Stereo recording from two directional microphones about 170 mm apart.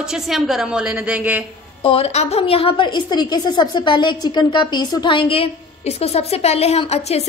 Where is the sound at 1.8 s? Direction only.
35° left (ahead or behind).